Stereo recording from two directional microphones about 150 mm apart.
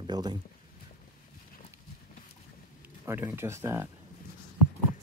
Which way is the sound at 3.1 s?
15° right (ahead or behind).